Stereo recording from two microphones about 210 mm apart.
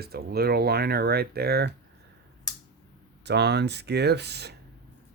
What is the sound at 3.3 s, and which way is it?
Speech, 50° right (ahead or behind).